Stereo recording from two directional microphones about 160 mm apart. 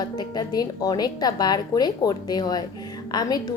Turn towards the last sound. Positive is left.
turn(degrees=25)  # may be behind; listen again after turning